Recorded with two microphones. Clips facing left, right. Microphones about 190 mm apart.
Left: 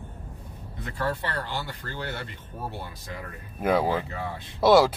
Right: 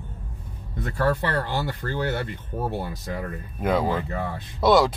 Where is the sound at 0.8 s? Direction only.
45° right (ahead or behind).